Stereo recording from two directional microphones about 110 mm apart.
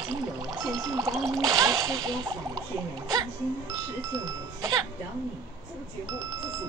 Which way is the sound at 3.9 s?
30° right (ahead or behind).